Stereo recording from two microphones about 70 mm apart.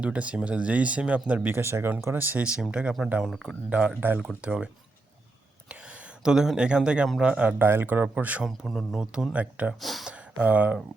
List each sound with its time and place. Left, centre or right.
0.0 s speech: centre
2.4 s speech: centre
3.2 s speech: centre
3.7 s speech: centre
8.4 s speech: centre
9.0 s speech: centre
9.8 s speech: centre
10.4 s speech: right